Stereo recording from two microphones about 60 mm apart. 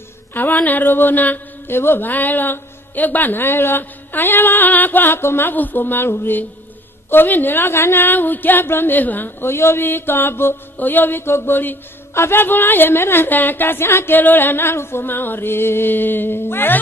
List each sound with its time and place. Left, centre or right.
0.3 s speech: left
12.1 s speech: left